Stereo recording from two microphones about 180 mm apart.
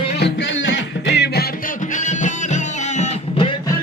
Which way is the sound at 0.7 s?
70° left (ahead or behind).